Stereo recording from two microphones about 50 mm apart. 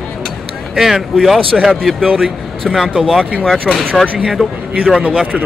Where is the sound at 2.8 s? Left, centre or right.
Centre.